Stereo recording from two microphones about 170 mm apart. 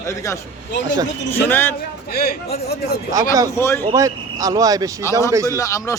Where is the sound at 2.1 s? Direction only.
65° left (ahead or behind).